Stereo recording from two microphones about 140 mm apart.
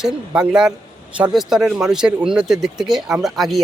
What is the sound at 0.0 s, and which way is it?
Speech, 5° right (ahead or behind).